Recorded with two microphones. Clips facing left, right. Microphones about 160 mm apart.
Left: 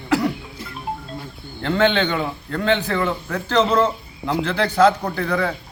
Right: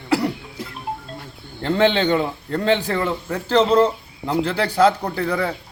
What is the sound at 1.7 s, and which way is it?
Speech, 35° right (ahead or behind).